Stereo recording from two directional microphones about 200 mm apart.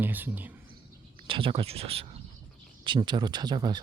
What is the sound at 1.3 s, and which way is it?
Speech, 25° right (ahead or behind).